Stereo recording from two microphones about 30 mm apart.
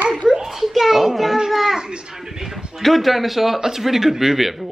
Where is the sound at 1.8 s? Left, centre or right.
Right.